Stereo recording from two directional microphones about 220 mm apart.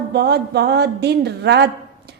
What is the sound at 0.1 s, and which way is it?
A woman's voice, 50° right (ahead or behind).